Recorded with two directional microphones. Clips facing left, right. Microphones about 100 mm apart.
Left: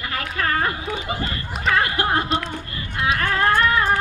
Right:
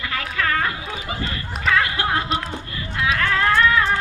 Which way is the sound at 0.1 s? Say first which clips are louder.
Even; 35° left (ahead or behind).